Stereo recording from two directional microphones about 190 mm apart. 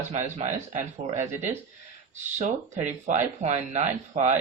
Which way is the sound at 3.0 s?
40° right (ahead or behind).